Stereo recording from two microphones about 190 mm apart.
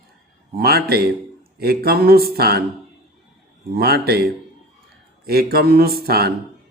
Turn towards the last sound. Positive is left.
turn(degrees=-55)  # may be behind; listen again after turning